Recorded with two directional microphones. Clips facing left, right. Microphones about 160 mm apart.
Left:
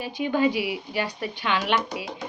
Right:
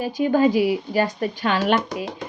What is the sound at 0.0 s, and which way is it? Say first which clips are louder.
A woman's voice: right 5 dB; 45° right (ahead or behind).